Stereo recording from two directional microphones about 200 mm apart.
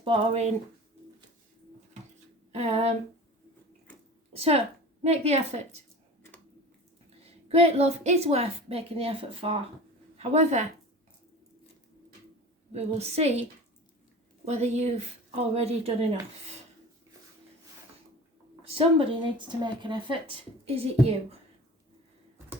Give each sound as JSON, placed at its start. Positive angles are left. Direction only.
{"t": 0.0, "sound": "speech", "side_deg": -25}
{"t": 2.5, "sound": "speech", "side_deg": -30}
{"t": 4.3, "sound": "a woman's voice", "side_deg": -30}
{"t": 7.3, "sound": "a woman's voice", "side_deg": -30}
{"t": 12.7, "sound": "a woman's voice", "side_deg": -30}
{"t": 14.4, "sound": "a woman's voice", "side_deg": -35}
{"t": 18.6, "sound": "a woman's voice", "side_deg": -30}